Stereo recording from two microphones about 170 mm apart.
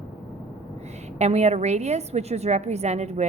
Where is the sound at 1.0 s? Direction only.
40° right (ahead or behind).